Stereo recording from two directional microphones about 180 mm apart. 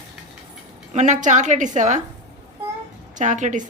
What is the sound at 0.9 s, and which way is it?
A woman's voice, 40° right (ahead or behind).